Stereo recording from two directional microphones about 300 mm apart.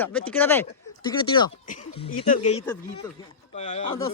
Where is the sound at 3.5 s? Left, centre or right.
Left.